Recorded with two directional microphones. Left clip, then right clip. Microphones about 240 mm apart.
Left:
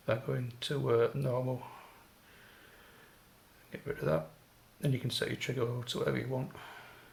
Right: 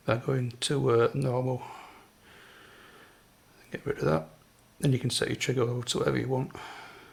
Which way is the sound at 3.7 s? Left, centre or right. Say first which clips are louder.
Right 5 dB; right.